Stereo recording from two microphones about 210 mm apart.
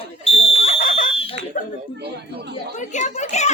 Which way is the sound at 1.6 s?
40° left (ahead or behind).